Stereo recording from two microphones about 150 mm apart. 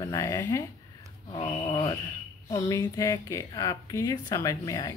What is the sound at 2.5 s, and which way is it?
A woman's voice, 25° left (ahead or behind).